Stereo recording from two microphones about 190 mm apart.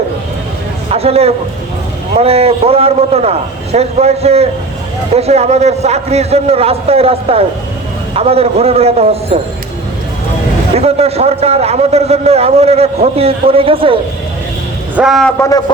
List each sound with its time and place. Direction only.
0.9 s a sound: 30° right (ahead or behind)
2.1 s a man's voice: 30° right (ahead or behind)
10.8 s a man's voice: 35° right (ahead or behind)
14.9 s a man's voice: centre (ahead or behind)
15.4 s a man's voice: 15° left (ahead or behind)